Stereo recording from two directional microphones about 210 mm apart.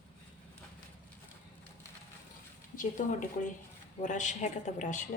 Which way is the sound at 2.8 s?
40° left (ahead or behind).